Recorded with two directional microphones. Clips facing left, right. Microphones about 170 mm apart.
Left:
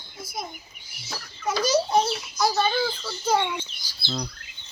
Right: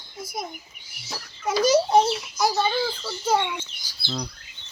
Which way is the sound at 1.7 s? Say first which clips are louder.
Right 4 dB; 20° right (ahead or behind).